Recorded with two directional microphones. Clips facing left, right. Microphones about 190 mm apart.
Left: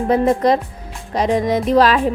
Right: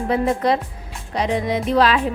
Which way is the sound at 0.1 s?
40° left (ahead or behind).